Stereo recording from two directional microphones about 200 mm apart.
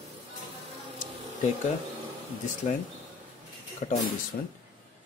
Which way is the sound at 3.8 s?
35° left (ahead or behind).